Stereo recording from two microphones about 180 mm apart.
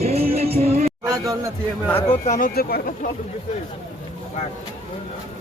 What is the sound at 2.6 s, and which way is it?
Speech, 55° left (ahead or behind).